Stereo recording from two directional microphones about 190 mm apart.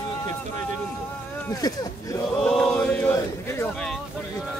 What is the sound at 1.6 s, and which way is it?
Speech, 20° left (ahead or behind).